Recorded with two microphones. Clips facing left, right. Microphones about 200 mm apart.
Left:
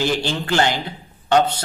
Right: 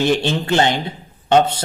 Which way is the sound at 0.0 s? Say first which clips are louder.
Right 4 dB; 20° right (ahead or behind).